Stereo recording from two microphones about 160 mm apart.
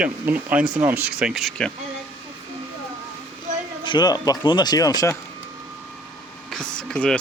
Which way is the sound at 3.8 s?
30° left (ahead or behind).